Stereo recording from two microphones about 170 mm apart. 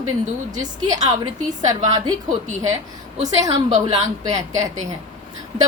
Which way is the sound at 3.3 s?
20° right (ahead or behind).